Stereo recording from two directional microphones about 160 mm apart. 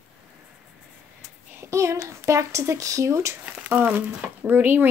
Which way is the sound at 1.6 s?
20° right (ahead or behind).